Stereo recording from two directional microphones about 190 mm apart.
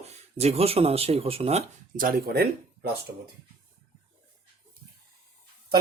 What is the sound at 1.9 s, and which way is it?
Speech, 50° right (ahead or behind).